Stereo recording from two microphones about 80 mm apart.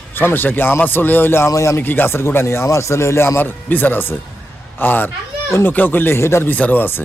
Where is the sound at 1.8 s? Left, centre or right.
Left.